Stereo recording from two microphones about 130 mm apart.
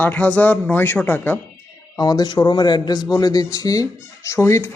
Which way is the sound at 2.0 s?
30° left (ahead or behind).